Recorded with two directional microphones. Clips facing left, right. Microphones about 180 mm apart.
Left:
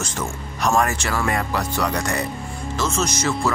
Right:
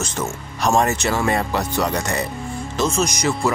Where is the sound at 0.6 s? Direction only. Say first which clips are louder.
Right 2 dB; 25° right (ahead or behind).